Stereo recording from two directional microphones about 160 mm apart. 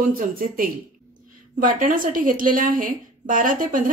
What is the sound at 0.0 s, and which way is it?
Speech, 60° right (ahead or behind).